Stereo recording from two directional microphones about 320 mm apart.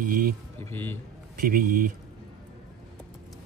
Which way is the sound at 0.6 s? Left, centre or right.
Centre.